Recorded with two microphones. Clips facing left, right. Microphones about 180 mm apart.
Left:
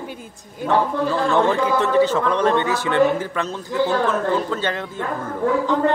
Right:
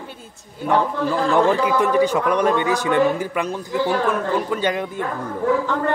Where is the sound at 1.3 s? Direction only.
15° right (ahead or behind).